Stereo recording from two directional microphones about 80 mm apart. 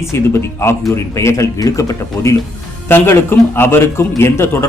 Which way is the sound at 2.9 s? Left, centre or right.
Left.